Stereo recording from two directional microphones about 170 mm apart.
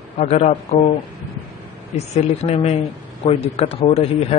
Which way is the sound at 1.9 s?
40° left (ahead or behind).